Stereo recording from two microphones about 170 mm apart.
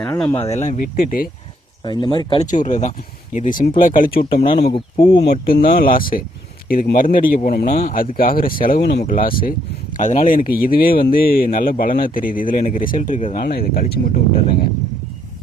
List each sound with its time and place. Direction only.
0.1 s speech: 10° left (ahead or behind)
0.3 s speech: 40° left (ahead or behind)
0.9 s speech: 60° left (ahead or behind)
1.8 s speech: 25° left (ahead or behind)
2.5 s speech: 50° left (ahead or behind)
4.6 s speech: 35° left (ahead or behind)
5.5 s speech: 65° left (ahead or behind)
7.7 s speech: 45° left (ahead or behind)
8.8 s speech: 80° left; by 9.6 s 60° left (ahead or behind)
10.0 s speech: 45° left (ahead or behind)
13.4 s speech: 65° left (ahead or behind)